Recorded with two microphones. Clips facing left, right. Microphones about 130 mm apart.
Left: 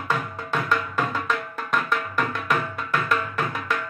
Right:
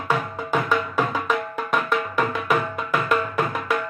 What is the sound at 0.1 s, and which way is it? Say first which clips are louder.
Music: right 4 dB; 10° right (ahead or behind).